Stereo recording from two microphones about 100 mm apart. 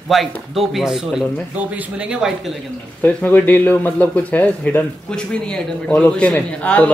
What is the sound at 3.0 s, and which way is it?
A man's voice, 15° left (ahead or behind).